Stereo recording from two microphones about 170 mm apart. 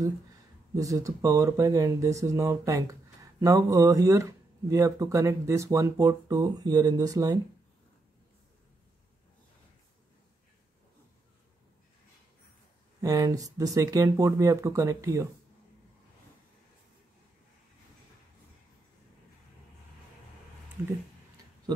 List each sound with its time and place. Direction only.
0.7 s speech: 20° right (ahead or behind)
13.0 s speech: 20° right (ahead or behind)